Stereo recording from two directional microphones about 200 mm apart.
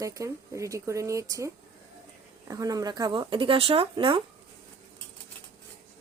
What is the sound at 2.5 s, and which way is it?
Speech, 15° right (ahead or behind).